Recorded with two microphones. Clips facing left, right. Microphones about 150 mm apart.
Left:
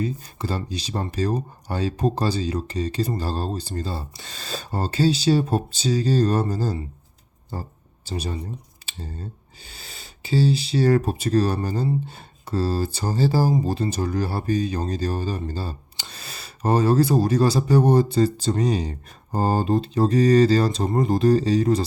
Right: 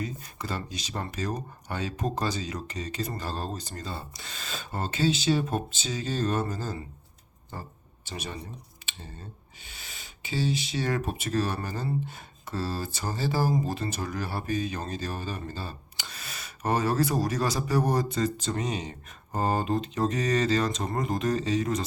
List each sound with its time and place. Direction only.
0.0 s speech: 30° left (ahead or behind)